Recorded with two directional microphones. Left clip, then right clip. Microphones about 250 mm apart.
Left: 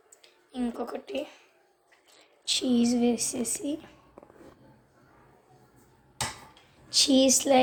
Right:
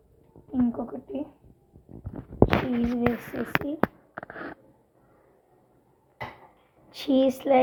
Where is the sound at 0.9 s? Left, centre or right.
Left.